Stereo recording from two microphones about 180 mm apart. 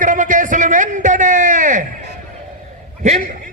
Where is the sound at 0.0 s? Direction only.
45° right (ahead or behind).